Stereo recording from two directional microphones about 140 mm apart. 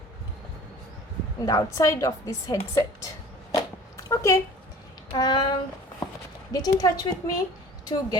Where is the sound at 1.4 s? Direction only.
25° left (ahead or behind).